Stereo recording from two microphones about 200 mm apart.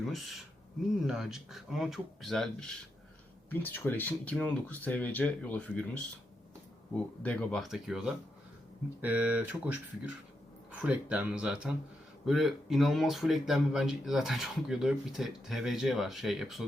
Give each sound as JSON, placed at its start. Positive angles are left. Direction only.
{"t": 0.0, "sound": "speech", "side_deg": 0}